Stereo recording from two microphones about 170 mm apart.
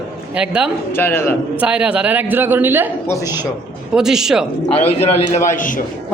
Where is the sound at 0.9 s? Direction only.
15° left (ahead or behind).